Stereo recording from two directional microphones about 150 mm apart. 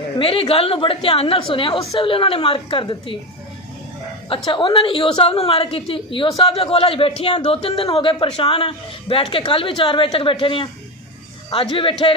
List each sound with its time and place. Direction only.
0.2 s a woman's voice: 35° left (ahead or behind)
4.5 s a woman's voice: 35° left (ahead or behind)